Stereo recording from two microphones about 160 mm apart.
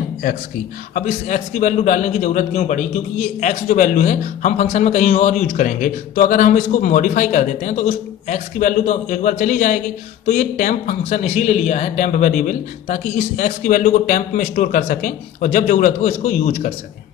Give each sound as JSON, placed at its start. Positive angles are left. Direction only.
{"t": 0.9, "sound": "a man's voice", "side_deg": 50}